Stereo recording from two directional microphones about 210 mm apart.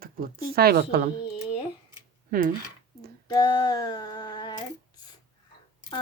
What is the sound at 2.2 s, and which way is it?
Speech, 40° right (ahead or behind).